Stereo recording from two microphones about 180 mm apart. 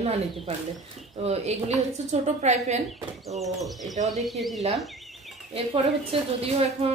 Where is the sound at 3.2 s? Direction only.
Centre (ahead or behind).